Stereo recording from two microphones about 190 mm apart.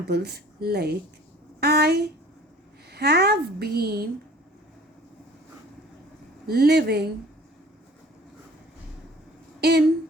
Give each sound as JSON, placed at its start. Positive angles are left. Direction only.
{"t": 0.1, "sound": "a woman's voice", "side_deg": -60}
{"t": 6.5, "sound": "a woman's voice", "side_deg": -55}
{"t": 9.6, "sound": "speech", "side_deg": -60}